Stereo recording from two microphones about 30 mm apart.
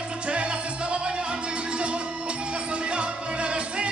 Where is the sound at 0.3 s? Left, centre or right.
Right.